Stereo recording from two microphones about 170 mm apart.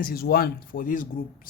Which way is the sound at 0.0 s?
65° left (ahead or behind).